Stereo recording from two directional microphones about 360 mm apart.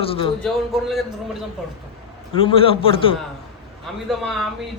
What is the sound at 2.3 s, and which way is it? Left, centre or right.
Speech, centre.